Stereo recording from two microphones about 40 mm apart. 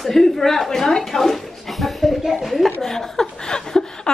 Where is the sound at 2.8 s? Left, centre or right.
Centre.